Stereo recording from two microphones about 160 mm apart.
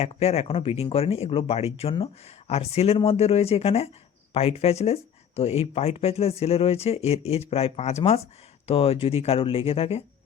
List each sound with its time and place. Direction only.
0.0 s speech: 40° left (ahead or behind)